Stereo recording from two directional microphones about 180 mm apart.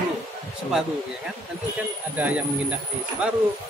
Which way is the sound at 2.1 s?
10° right (ahead or behind).